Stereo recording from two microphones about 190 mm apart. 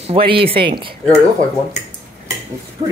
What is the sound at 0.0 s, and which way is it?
Speech, 30° right (ahead or behind).